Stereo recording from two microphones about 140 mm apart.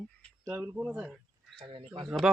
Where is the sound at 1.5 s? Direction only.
35° right (ahead or behind).